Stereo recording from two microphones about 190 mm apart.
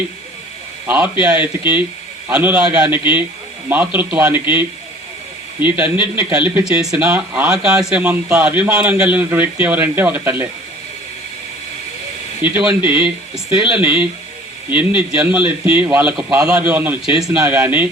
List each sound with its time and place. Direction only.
0.9 s a man's voice: 10° right (ahead or behind)
5.7 s speech: 10° right (ahead or behind)
12.4 s speech: 5° right (ahead or behind)